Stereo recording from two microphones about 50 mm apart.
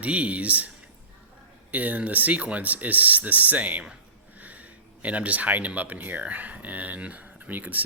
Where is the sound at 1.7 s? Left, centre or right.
Right.